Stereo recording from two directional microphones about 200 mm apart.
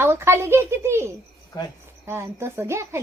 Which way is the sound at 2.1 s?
10° right (ahead or behind).